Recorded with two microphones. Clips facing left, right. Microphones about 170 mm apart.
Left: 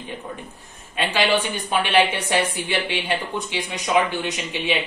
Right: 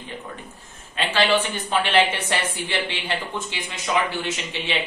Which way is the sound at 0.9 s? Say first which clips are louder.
Even; 15° left (ahead or behind).